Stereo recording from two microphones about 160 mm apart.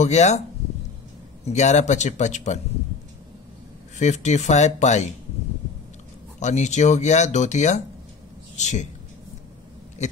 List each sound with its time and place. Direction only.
0.0 s speech: 45° left (ahead or behind)
1.4 s speech: 45° left (ahead or behind)
4.0 s speech: 45° left (ahead or behind)
6.4 s speech: 45° left (ahead or behind)